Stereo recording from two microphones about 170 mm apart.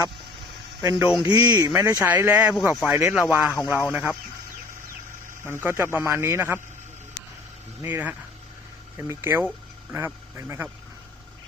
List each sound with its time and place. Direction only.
0.8 s speech: 20° right (ahead or behind)
1.0 s speech: 5° right (ahead or behind)
1.3 s speech: 20° right (ahead or behind)
5.5 s speech: 15° right (ahead or behind)
7.8 s speech: 10° right (ahead or behind)